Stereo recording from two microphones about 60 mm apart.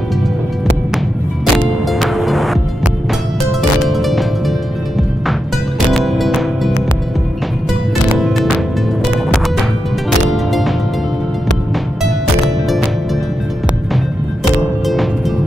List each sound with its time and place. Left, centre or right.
0.9 s music: centre
3.9 s music: centre
5.9 s music: centre
10.3 s music: centre
14.9 s music: centre